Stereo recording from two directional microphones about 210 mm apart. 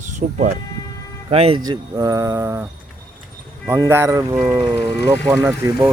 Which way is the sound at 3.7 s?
10° right (ahead or behind).